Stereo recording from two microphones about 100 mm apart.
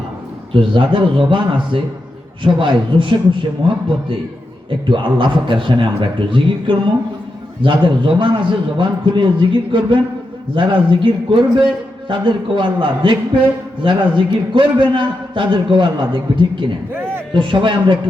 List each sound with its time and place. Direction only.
0.5 s a man's voice: 60° right (ahead or behind)
4.9 s a man's voice: 55° right (ahead or behind)